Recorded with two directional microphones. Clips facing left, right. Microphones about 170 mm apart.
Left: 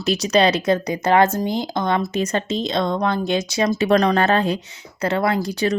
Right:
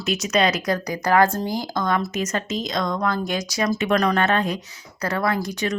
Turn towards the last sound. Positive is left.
turn(degrees=30)  # may be behind; listen again after turning